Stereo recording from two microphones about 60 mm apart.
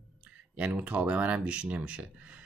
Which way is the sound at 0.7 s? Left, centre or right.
Right.